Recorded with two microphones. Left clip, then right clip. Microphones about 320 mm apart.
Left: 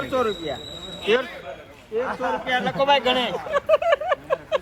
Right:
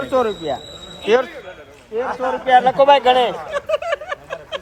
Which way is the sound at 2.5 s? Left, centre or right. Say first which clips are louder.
Right 10 dB; right.